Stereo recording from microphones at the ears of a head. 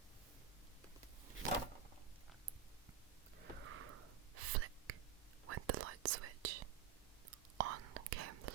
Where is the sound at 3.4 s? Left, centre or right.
Right.